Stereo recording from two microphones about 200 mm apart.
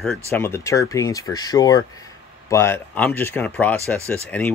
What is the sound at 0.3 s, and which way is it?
Speech, 10° left (ahead or behind).